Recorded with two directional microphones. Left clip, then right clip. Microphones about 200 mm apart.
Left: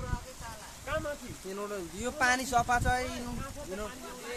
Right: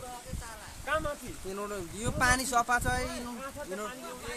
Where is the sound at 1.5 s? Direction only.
5° right (ahead or behind).